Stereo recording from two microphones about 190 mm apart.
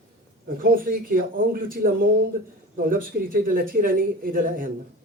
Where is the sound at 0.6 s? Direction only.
50° right (ahead or behind).